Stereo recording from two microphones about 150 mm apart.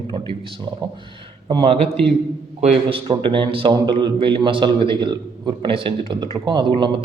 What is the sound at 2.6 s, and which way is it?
Speech, 50° right (ahead or behind).